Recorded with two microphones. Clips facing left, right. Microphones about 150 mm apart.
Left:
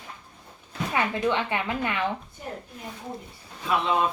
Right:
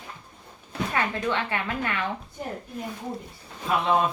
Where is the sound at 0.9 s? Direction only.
20° left (ahead or behind).